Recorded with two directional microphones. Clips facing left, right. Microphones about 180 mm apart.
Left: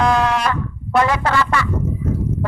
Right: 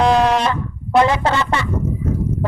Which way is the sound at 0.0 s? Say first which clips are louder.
Right 3 dB; 30° right (ahead or behind).